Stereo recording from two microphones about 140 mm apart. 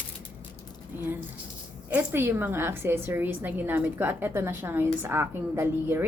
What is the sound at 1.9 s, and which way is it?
A woman's voice, 15° right (ahead or behind).